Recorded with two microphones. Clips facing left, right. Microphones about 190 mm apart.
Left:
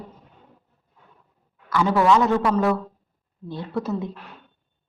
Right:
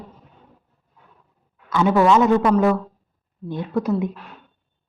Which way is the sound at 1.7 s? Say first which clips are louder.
Right 2 dB; 20° right (ahead or behind).